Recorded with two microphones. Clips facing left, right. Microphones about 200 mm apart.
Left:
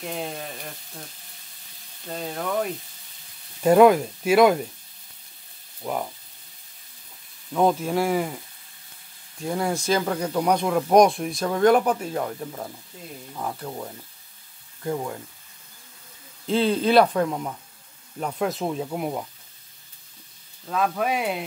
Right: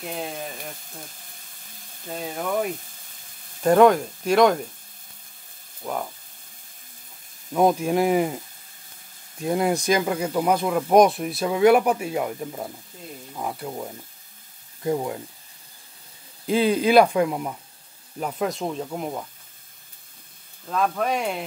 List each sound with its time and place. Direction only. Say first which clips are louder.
0.0 s speech: even; centre (ahead or behind)
2.0 s speech: right 1 dB; 5° right (ahead or behind)
3.6 s speech: left 1 dB; 5° left (ahead or behind)
7.5 s speech: right 2 dB; 15° right (ahead or behind)
9.4 s speech: right 3 dB; 20° right (ahead or behind)
16.4 s speech: right 1 dB; 10° right (ahead or behind); by 19.2 s 5° left (ahead or behind)
20.7 s speech: even; 5° left (ahead or behind)